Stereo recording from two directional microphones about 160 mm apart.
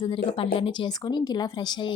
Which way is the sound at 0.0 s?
35° left (ahead or behind).